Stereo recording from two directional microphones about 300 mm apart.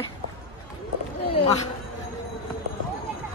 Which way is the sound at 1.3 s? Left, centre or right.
Centre.